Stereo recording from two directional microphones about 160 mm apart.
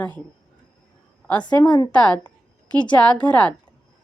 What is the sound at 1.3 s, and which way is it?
Speech, 10° left (ahead or behind).